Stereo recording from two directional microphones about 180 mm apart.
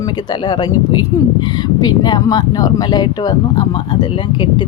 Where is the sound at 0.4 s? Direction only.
25° left (ahead or behind).